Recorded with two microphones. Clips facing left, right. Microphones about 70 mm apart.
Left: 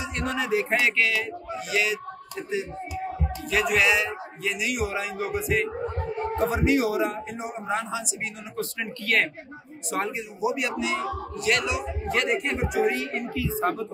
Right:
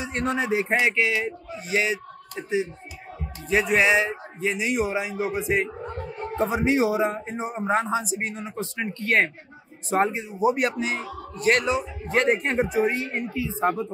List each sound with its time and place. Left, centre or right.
0.0 s a man's voice: right
8.5 s a man's voice: right
10.4 s a man's voice: right